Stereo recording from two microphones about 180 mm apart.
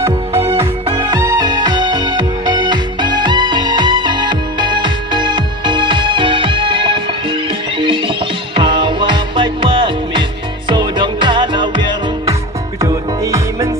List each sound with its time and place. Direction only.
0.9 s music: 25° right (ahead or behind)